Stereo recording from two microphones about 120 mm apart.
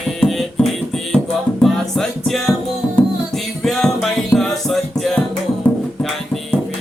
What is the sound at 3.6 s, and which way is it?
Music, centre (ahead or behind).